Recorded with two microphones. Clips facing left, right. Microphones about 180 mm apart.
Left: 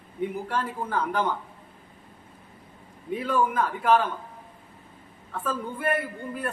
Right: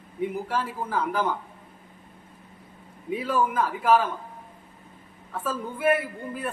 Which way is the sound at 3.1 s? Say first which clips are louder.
Even; 5° right (ahead or behind).